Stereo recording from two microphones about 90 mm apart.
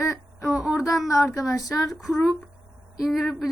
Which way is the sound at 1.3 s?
40° left (ahead or behind).